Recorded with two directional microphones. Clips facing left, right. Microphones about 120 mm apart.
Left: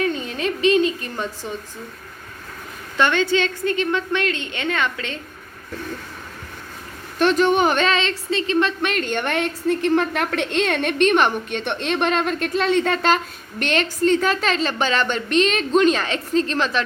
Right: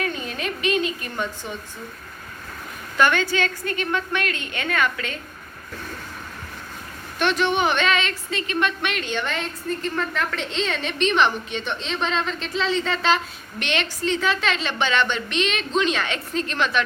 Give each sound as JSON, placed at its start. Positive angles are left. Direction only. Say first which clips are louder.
{"t": 0.0, "sound": "a sound", "louder": "left 5 dB", "side_deg": 30}
{"t": 3.0, "sound": "a woman's voice", "louder": "left 2 dB", "side_deg": 25}
{"t": 7.2, "sound": "a woman's voice", "louder": "left 5 dB", "side_deg": 40}